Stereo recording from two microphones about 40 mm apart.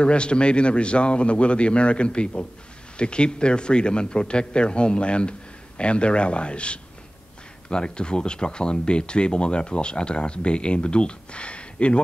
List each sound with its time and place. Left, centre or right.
0.0 s speech: left